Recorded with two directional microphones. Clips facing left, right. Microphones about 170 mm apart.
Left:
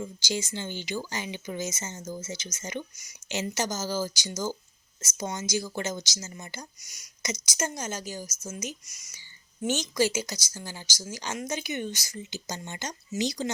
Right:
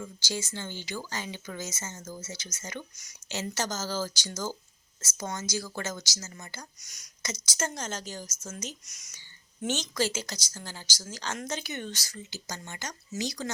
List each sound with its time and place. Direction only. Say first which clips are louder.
0.0 s speech: left 3 dB; 15° left (ahead or behind)
6.8 s speech: left 4 dB; 5° left (ahead or behind); by 13.5 s 20° left (ahead or behind)